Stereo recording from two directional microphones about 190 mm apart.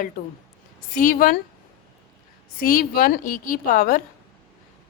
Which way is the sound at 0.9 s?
45° left (ahead or behind).